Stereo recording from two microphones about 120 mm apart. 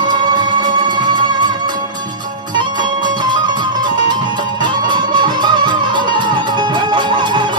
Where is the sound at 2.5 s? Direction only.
40° right (ahead or behind).